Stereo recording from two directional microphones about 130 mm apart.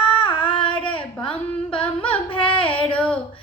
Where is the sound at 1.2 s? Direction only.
45° left (ahead or behind).